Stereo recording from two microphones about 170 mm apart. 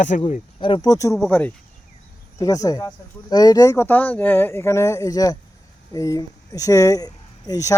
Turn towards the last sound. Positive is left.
turn(degrees=20)  # may be behind; listen again after turning